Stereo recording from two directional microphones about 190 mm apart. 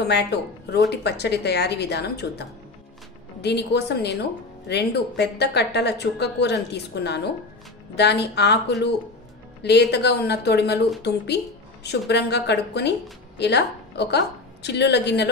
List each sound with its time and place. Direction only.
0.0 s a woman's voice: 60° left (ahead or behind)